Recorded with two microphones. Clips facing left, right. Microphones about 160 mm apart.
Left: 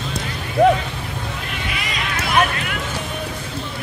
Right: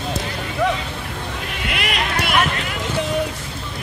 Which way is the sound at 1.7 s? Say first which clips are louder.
Right 6 dB; 70° right (ahead or behind).